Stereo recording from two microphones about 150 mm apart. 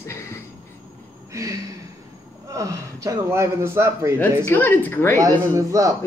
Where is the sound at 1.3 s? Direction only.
20° right (ahead or behind).